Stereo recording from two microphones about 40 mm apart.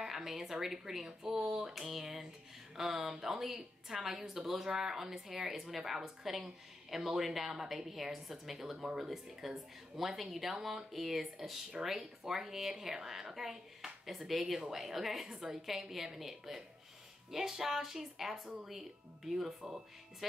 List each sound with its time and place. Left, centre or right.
0.0 s a woman's voice: centre
9.4 s a woman's voice: centre
15.2 s a woman's voice: right
15.5 s a woman's voice: centre